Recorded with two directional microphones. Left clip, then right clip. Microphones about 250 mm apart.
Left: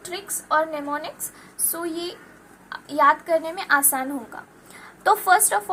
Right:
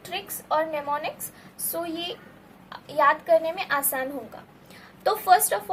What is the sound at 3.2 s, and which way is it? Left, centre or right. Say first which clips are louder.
Speech: right 1 dB; left.